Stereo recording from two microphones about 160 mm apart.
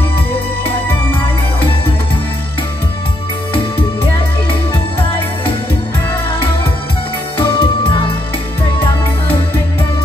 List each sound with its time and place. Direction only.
7.3 s music: 30° left (ahead or behind)